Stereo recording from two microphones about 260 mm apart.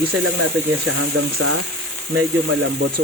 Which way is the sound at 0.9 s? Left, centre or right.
Right.